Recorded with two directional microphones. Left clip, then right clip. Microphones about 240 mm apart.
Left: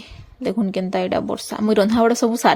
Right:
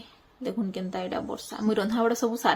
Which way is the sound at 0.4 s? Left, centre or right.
Left.